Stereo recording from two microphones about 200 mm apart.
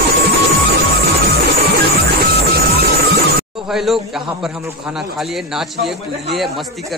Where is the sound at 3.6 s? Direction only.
Centre (ahead or behind).